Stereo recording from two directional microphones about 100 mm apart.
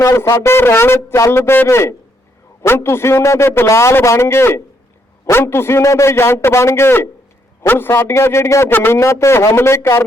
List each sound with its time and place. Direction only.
0.0 s a man's voice: 30° left (ahead or behind)